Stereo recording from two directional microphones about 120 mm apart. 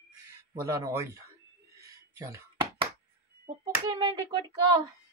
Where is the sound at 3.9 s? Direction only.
40° right (ahead or behind).